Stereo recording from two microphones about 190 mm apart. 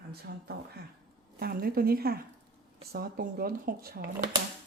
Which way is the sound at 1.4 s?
55° right (ahead or behind).